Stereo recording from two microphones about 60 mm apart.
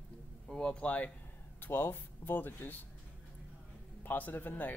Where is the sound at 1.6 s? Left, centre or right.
Left.